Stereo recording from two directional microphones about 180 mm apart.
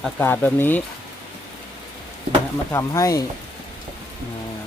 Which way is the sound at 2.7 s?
15° left (ahead or behind).